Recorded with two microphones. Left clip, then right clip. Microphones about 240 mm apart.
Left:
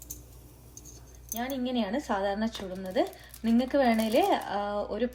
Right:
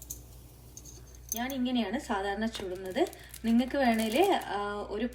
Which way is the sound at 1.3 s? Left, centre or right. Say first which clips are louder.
Left 1 dB; left.